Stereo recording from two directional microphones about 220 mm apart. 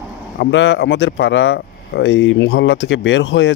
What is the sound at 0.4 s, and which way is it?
Speech, 55° left (ahead or behind).